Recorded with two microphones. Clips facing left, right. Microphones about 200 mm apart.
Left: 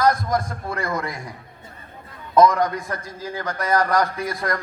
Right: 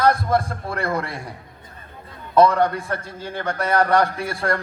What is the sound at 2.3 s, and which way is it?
A man's voice, 30° right (ahead or behind).